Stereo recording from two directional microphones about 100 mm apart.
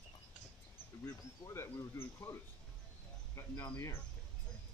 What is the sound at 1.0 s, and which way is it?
Speech, 30° left (ahead or behind).